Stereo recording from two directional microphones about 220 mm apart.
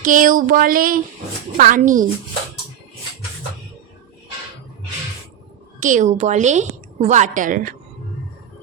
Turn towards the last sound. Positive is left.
turn(degrees=-35)  # may be behind; listen again after turning